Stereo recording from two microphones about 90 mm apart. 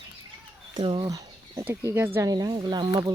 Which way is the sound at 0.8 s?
65° right (ahead or behind).